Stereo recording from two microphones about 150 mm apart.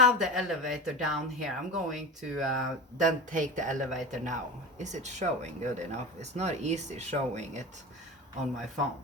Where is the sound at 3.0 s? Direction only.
60° right (ahead or behind).